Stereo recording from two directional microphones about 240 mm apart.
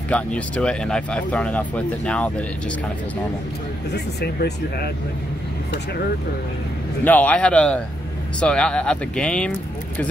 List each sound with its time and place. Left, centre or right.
0.1 s speech: centre
3.9 s speech: left
7.1 s speech: centre